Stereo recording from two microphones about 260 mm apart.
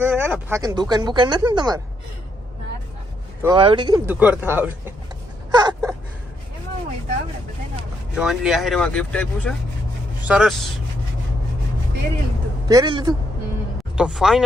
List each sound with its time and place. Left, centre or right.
0.0 s speech: centre
3.4 s speech: centre
5.5 s a sound: centre
8.1 s speech: centre
12.6 s speech: centre
13.9 s speech: centre